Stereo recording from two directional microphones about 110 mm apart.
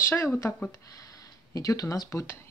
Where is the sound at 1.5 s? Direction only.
30° left (ahead or behind).